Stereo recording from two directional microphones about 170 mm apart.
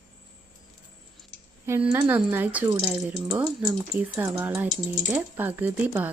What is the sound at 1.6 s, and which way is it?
Speech, 15° right (ahead or behind).